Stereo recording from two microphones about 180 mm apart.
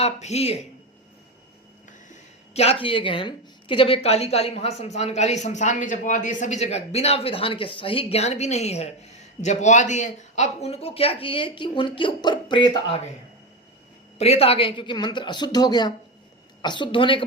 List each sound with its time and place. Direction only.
0.0 s a woman's voice: 35° left (ahead or behind)
2.5 s a woman's voice: 35° left (ahead or behind)
14.2 s speech: 35° left (ahead or behind)